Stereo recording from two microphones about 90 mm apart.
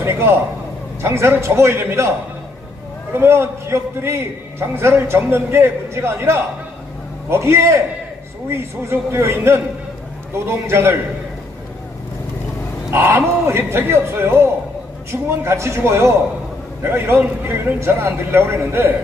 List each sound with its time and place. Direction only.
0.0 s a man's voice: 25° right (ahead or behind)
12.9 s a man's voice: 25° right (ahead or behind)